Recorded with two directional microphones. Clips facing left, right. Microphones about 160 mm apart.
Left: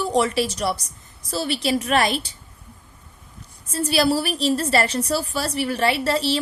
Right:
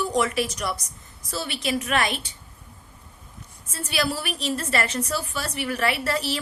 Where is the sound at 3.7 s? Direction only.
35° left (ahead or behind).